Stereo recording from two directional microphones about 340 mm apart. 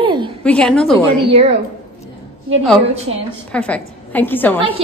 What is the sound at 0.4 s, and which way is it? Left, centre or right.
Speech, centre.